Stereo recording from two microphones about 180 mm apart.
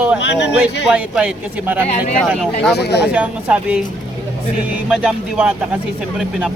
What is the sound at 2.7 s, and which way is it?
Speech, 65° left (ahead or behind).